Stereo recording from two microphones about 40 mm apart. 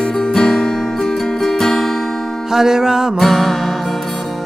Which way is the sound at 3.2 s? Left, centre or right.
Centre.